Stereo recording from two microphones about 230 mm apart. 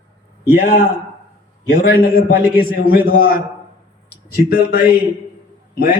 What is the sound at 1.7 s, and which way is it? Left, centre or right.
A man's voice, left.